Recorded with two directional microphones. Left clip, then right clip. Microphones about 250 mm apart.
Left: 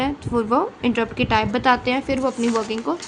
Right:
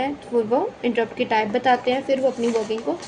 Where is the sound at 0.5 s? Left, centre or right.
Left.